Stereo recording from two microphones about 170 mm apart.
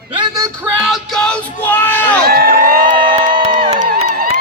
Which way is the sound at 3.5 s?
25° right (ahead or behind).